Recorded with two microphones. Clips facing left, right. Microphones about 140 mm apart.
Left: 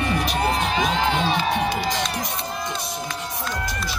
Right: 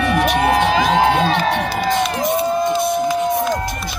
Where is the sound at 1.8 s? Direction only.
55° right (ahead or behind).